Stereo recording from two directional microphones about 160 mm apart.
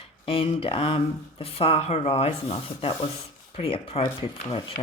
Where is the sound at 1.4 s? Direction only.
35° left (ahead or behind).